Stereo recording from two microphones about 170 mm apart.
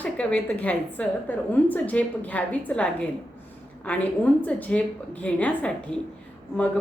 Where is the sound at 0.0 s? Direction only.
5° left (ahead or behind).